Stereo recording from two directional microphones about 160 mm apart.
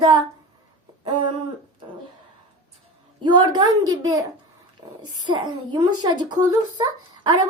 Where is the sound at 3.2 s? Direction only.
25° right (ahead or behind).